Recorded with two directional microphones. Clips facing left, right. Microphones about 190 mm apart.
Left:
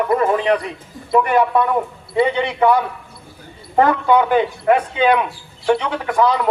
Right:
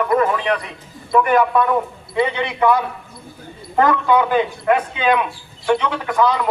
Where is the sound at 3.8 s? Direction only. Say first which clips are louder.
Left 1 dB; 30° left (ahead or behind).